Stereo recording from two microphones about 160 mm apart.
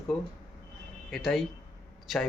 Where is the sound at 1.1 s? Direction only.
Centre (ahead or behind).